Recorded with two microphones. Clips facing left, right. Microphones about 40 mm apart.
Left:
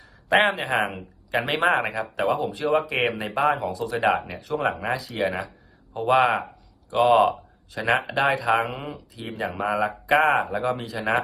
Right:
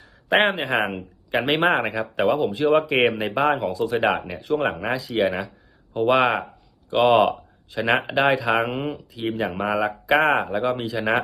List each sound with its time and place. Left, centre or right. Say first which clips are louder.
0.3 s speech: right 1 dB; right
5.0 s speech: right 7 dB; right
6.1 s speech: even; right
7.2 s speech: right 1 dB; right